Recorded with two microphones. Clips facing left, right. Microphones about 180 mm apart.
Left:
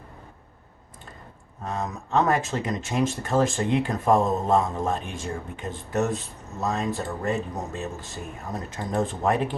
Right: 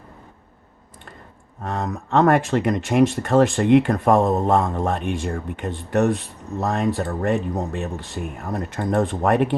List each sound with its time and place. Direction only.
1.6 s speech: 60° right (ahead or behind)